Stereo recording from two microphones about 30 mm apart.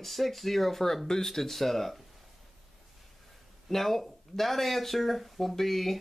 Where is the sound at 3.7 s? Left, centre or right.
Centre.